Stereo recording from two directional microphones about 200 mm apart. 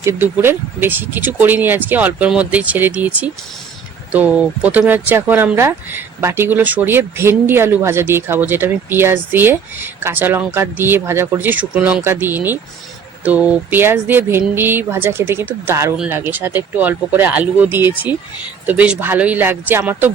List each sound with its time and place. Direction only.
0.0 s speech: 10° right (ahead or behind)
4.1 s speech: 5° right (ahead or behind)